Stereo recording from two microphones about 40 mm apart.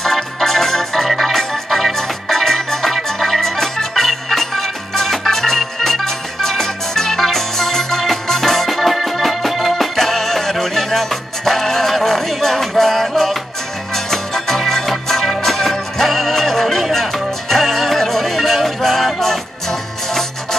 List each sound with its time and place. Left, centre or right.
0.0 s organ: centre
13.9 s music: centre